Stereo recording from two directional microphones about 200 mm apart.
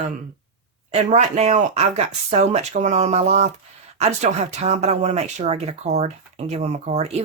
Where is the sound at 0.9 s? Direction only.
35° right (ahead or behind).